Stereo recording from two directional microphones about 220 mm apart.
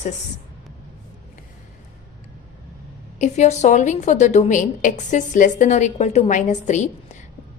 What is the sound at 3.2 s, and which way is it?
A woman's voice, 30° left (ahead or behind).